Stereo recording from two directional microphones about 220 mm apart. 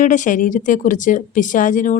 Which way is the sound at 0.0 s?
35° left (ahead or behind).